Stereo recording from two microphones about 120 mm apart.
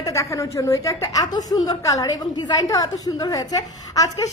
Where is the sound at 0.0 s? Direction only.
25° left (ahead or behind).